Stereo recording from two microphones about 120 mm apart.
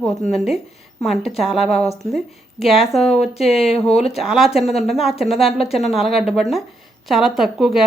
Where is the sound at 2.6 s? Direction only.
Centre (ahead or behind).